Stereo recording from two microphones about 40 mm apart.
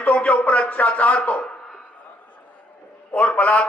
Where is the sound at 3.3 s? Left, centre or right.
Left.